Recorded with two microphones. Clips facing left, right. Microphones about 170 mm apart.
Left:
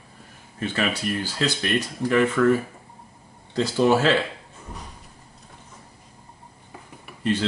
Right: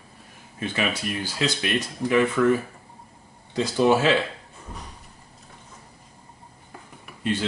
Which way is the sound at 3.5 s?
10° right (ahead or behind).